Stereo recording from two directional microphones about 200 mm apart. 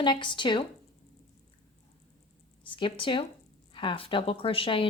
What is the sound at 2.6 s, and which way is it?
Speech, 25° left (ahead or behind).